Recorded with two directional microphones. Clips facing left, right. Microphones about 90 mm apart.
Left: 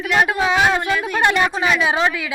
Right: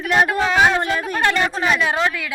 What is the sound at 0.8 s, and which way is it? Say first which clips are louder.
Speech: even; 40° right (ahead or behind).